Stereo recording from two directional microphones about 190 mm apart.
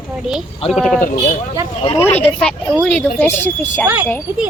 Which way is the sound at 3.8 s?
10° right (ahead or behind).